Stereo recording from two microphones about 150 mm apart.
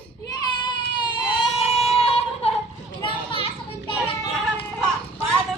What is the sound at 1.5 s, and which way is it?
Music, 45° left (ahead or behind).